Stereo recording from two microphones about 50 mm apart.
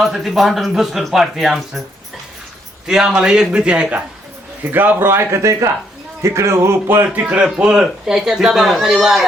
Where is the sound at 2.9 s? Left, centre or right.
Centre.